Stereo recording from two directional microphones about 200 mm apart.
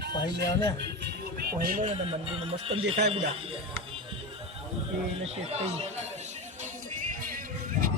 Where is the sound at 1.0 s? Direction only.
50° right (ahead or behind).